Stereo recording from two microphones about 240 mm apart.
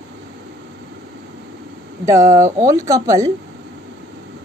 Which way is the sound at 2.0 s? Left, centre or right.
Centre.